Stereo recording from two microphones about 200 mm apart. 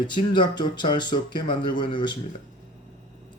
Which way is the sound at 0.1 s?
25° left (ahead or behind).